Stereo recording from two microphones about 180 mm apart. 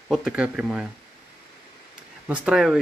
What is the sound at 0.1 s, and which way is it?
Speech, 5° right (ahead or behind).